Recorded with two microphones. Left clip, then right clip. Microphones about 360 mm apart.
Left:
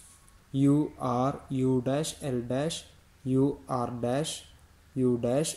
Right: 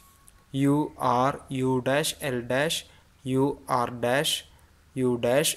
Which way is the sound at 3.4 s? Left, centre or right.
Right.